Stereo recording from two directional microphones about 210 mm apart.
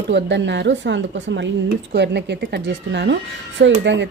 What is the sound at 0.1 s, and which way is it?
A woman's voice, 55° right (ahead or behind).